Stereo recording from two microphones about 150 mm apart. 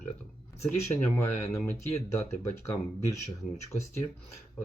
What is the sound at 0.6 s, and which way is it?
Speech, 20° left (ahead or behind).